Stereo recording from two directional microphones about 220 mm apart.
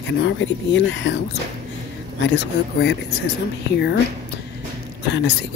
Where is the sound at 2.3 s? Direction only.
50° left (ahead or behind).